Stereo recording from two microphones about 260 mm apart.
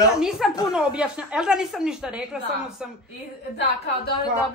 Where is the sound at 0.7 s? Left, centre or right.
Centre.